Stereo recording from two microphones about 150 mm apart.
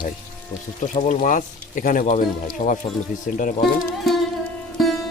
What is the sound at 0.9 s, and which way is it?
Speech, 55° left (ahead or behind).